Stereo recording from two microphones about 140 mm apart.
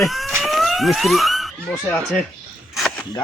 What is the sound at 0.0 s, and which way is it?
Police car, centre (ahead or behind).